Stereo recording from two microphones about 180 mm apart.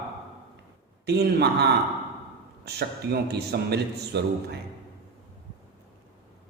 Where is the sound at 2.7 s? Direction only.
65° right (ahead or behind).